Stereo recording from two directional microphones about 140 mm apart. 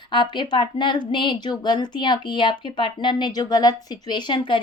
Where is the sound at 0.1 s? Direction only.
35° left (ahead or behind).